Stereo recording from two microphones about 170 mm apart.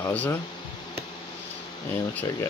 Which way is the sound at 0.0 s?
10° left (ahead or behind).